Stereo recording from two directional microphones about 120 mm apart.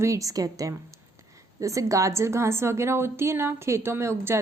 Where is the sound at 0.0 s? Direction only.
25° right (ahead or behind).